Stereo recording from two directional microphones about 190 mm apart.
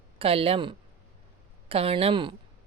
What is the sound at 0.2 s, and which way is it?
Speech, 30° right (ahead or behind).